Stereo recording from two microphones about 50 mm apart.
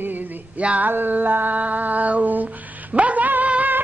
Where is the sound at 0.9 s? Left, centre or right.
Right.